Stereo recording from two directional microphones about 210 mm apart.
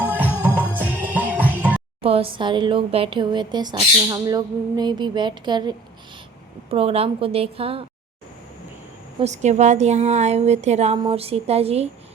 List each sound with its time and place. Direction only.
0.0 s music: 10° right (ahead or behind)
2.0 s speech: 25° right (ahead or behind)
9.2 s speech: 35° right (ahead or behind)